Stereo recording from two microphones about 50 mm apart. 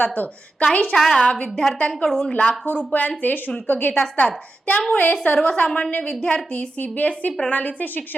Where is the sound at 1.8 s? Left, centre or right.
Centre.